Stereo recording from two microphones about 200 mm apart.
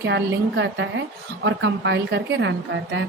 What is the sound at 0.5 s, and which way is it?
A woman's voice, 65° right (ahead or behind).